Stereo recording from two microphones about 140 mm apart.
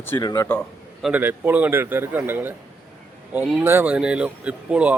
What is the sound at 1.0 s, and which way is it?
Speech, 10° right (ahead or behind).